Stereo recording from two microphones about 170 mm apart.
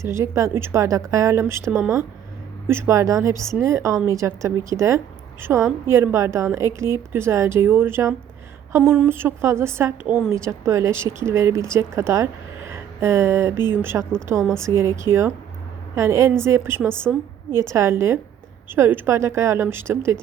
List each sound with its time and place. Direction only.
0.0 s a woman's voice: 15° right (ahead or behind)
14.3 s a woman's voice: 5° left (ahead or behind)
14.8 s a woman's voice: 15° right (ahead or behind)